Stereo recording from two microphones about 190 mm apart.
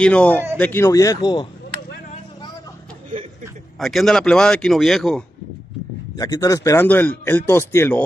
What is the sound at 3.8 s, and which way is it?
A man's voice, centre (ahead or behind).